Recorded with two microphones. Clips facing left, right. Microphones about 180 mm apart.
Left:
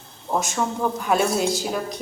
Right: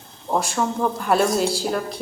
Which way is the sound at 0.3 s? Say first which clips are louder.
Right 2 dB; centre (ahead or behind).